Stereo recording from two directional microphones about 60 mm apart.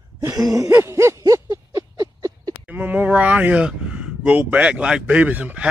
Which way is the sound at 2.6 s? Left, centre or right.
Right.